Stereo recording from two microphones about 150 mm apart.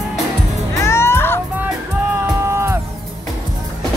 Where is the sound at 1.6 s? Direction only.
15° right (ahead or behind).